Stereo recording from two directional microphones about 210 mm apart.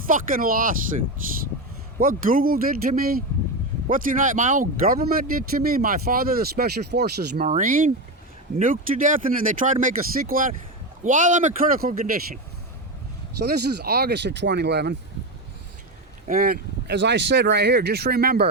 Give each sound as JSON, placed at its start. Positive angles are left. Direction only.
{"t": 0.1, "sound": "speech", "side_deg": -40}
{"t": 2.0, "sound": "speech", "side_deg": -40}
{"t": 7.4, "sound": "speech", "side_deg": -40}
{"t": 13.4, "sound": "speech", "side_deg": -50}
{"t": 16.2, "sound": "speech", "side_deg": -45}